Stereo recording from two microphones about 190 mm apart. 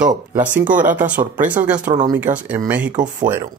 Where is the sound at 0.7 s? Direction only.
45° right (ahead or behind).